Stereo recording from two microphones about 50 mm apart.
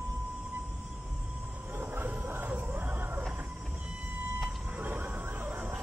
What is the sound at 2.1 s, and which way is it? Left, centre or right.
Music, right.